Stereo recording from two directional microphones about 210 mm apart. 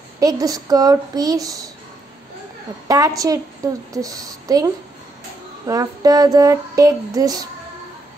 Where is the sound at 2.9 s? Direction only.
15° right (ahead or behind).